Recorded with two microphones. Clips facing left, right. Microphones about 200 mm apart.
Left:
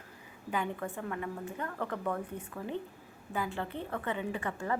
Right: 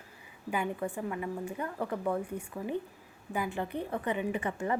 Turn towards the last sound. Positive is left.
turn(degrees=-20)  # may be behind; listen again after turning